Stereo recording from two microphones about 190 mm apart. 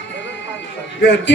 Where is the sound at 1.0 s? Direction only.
65° left (ahead or behind).